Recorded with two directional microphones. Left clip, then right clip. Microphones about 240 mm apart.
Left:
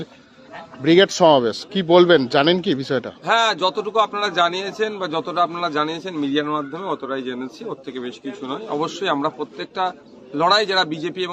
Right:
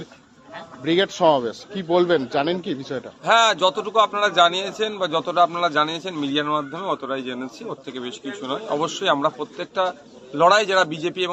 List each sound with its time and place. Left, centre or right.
0.8 s a man's voice: left
3.2 s a man's voice: centre